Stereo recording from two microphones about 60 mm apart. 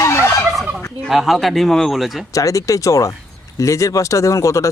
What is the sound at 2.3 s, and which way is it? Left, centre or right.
Speech, left.